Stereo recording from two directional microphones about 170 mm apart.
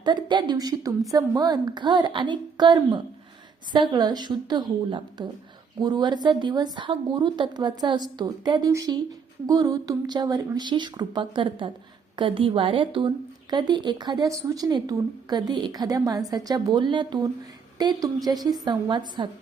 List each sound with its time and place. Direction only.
0.0 s a woman's voice: 25° right (ahead or behind)